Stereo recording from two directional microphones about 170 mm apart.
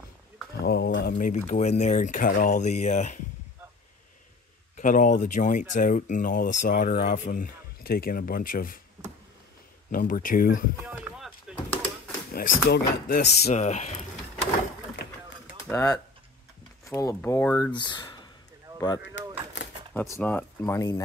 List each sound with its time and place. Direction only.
0.7 s a sound: 75° left (ahead or behind)
1.1 s speech: 45° left (ahead or behind)
4.7 s speech: 50° left (ahead or behind)
9.8 s speech: 55° left (ahead or behind)
10.9 s a sound: 10° right (ahead or behind)
11.5 s door: 5° right (ahead or behind)
12.3 s speech: 65° left (ahead or behind)
13.4 s vehicle: 40° left (ahead or behind)
15.7 s speech: 20° left (ahead or behind)
17.7 s speech: 25° left (ahead or behind)
19.2 s a sound: 90° left
19.9 s speech: 10° left (ahead or behind)